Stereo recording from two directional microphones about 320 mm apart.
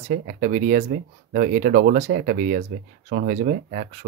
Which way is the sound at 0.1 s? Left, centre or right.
Right.